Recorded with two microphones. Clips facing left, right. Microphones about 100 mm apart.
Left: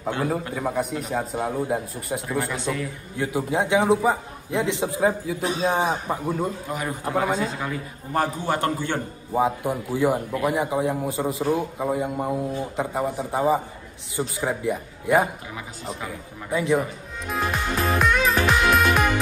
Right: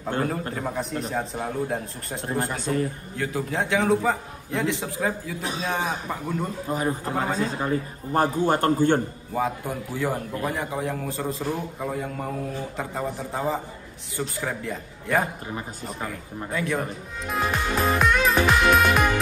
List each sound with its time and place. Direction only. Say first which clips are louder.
0.6 s a man's voice: left 3 dB; 10° left (ahead or behind)
2.5 s a man's voice: right 2 dB; 45° right (ahead or behind)
3.2 s a man's voice: left 3 dB; 15° left (ahead or behind)
6.7 s a man's voice: right 3 dB; 35° right (ahead or behind)
7.1 s a man's voice: left 3 dB; 15° left (ahead or behind)
7.3 s a man's voice: right 2 dB; 40° right (ahead or behind)
9.3 s a man's voice: left 5 dB; 20° left (ahead or behind)
16.5 s a man's voice: left 5 dB; 15° left (ahead or behind)
17.3 s music: even; centre (ahead or behind)